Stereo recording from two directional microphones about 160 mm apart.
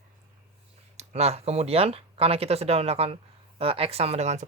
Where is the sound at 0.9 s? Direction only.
40° right (ahead or behind).